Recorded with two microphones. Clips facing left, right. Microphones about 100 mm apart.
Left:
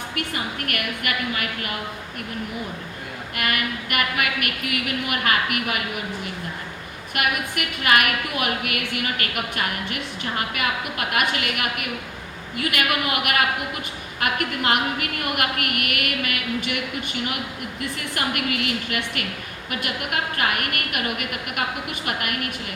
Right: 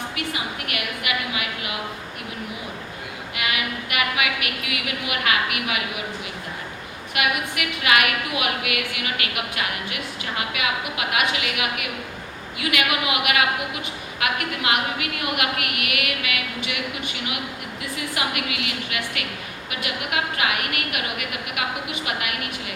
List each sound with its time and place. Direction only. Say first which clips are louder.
0.2 s a woman's voice: left 3 dB; 50° left (ahead or behind)
3.3 s a woman's voice: left 1 dB; 50° left (ahead or behind)
7.1 s a woman's voice: even; 45° left (ahead or behind)